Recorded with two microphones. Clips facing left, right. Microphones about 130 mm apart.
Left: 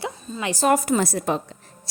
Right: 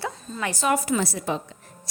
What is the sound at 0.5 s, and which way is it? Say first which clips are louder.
A woman's voice: left 4 dB; 40° left (ahead or behind).